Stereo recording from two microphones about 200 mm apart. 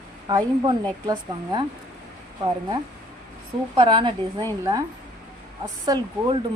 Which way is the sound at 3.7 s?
25° right (ahead or behind).